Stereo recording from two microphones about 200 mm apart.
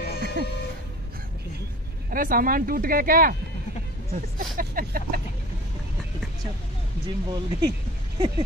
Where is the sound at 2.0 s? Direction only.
45° right (ahead or behind).